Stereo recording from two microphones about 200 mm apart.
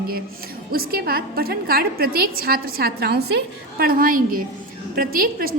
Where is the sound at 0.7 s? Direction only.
50° right (ahead or behind).